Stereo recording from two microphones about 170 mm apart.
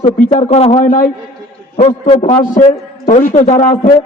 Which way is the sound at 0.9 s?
50° left (ahead or behind).